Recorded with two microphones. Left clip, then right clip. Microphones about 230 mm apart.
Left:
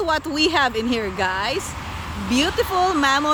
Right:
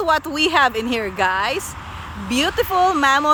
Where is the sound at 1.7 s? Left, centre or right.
Left.